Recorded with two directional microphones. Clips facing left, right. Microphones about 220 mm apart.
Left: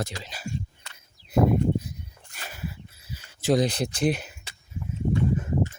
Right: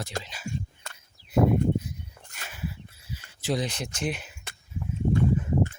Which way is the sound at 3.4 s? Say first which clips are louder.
Left 7 dB; 40° left (ahead or behind).